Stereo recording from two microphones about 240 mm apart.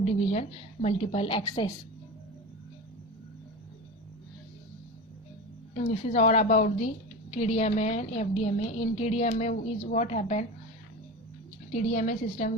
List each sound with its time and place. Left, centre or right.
0.0 s a woman's voice: left
5.7 s a woman's voice: left
11.7 s a woman's voice: left